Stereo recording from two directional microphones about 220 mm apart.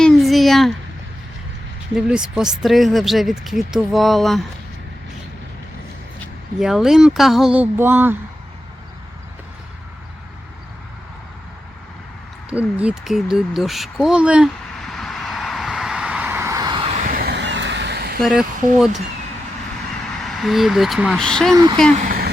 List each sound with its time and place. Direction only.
0.0 s a sound: centre (ahead or behind)
2.0 s speech: 5° right (ahead or behind)
6.6 s speech: centre (ahead or behind)
12.5 s a sound: 5° right (ahead or behind); by 17.0 s 25° right (ahead or behind)
17.0 s vehicle: 40° right (ahead or behind)
18.2 s speech: centre (ahead or behind)
20.2 s speech: centre (ahead or behind)
21.5 s speech: 15° right (ahead or behind)
21.9 s vehicle: 40° right (ahead or behind)